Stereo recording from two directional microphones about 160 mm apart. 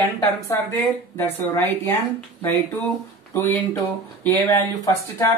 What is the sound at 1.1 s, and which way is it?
Speech, 15° left (ahead or behind).